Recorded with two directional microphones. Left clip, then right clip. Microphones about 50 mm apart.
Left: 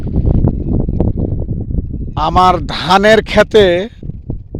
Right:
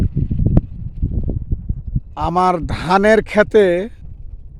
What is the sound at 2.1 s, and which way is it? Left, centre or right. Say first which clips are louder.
Speech: left 6 dB; centre.